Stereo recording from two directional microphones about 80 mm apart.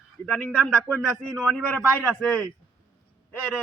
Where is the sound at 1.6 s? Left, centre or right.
Left.